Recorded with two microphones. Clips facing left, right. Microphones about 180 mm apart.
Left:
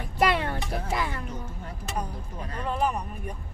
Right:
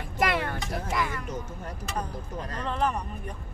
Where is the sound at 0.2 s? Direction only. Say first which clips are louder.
Left 2 dB; 30° left (ahead or behind).